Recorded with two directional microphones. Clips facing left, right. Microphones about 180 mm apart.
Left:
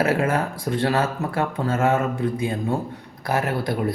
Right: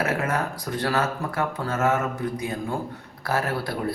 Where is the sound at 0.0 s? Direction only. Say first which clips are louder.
Left 4 dB; 30° left (ahead or behind).